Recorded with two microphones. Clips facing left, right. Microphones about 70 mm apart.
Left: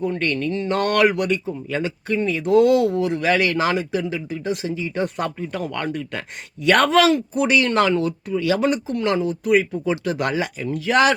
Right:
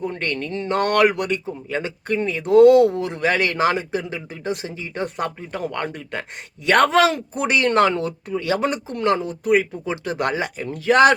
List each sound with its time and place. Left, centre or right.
0.2 s a man's voice: right